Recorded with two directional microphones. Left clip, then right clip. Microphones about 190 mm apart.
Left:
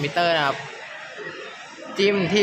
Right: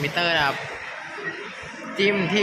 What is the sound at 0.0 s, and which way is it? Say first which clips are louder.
Speech: left 1 dB; 35° left (ahead or behind).